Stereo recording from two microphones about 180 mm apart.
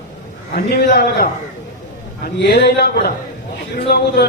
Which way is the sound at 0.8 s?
60° left (ahead or behind).